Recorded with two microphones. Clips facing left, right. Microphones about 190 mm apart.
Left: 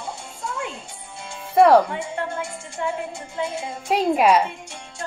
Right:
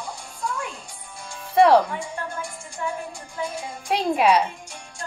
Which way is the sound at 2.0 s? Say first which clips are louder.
Left 4 dB; 25° left (ahead or behind).